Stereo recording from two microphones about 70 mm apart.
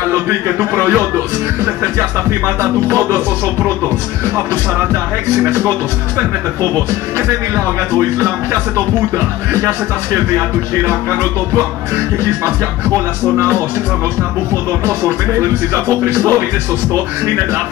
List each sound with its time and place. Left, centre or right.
14.9 s speech: right